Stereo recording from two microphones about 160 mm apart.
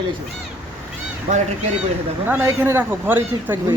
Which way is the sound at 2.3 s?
10° right (ahead or behind).